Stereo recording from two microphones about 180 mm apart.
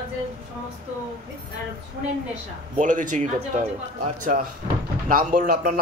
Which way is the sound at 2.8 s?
45° right (ahead or behind).